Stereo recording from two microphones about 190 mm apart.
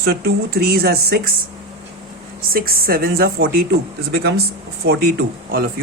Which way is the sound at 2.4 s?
50° right (ahead or behind).